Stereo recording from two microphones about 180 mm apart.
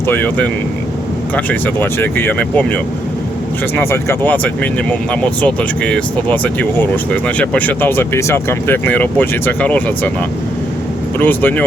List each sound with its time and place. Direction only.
0.1 s speech: 10° left (ahead or behind)
11.2 s speech: 10° left (ahead or behind)